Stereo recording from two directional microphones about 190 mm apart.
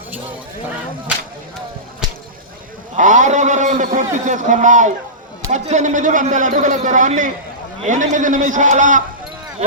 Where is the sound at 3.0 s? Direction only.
40° right (ahead or behind).